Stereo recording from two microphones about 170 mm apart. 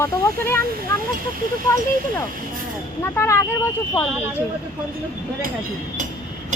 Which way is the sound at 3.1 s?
15° left (ahead or behind).